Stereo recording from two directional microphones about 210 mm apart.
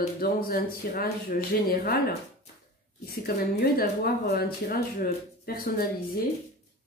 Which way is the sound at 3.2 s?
45° left (ahead or behind).